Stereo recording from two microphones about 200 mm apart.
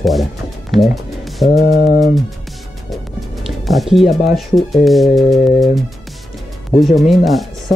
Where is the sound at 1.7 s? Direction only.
40° left (ahead or behind).